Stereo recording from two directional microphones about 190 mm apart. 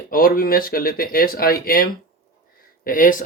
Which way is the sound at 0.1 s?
50° left (ahead or behind).